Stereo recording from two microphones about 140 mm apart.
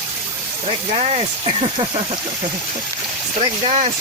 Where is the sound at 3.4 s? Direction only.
50° right (ahead or behind).